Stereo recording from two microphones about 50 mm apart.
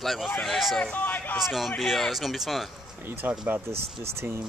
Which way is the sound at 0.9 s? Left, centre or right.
Left.